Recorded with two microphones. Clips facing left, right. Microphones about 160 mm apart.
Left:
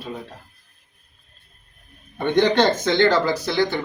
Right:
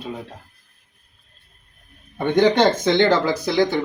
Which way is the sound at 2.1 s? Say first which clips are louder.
Right 1 dB; 10° right (ahead or behind).